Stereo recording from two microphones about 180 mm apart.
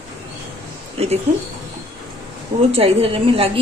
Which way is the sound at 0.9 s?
35° right (ahead or behind).